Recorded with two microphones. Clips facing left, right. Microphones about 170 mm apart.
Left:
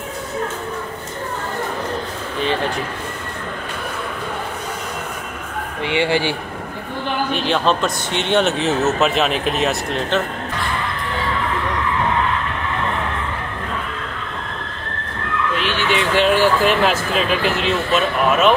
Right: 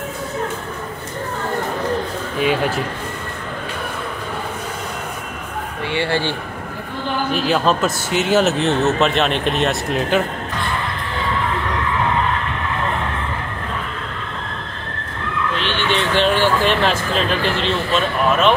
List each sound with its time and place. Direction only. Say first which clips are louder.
2.4 s speech: right 2 dB; 10° right (ahead or behind)
5.9 s speech: left 2 dB; 15° left (ahead or behind)
7.3 s speech: right 2 dB; 5° right (ahead or behind)
15.5 s speech: left 1 dB; 5° left (ahead or behind)